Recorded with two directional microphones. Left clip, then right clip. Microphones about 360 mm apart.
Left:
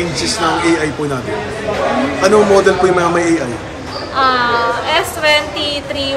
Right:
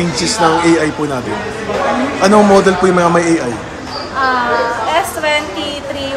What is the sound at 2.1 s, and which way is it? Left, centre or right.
A man's voice, centre.